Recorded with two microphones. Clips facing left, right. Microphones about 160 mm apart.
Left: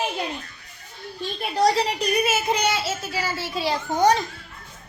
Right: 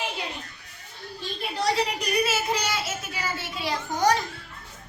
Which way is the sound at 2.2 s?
20° left (ahead or behind).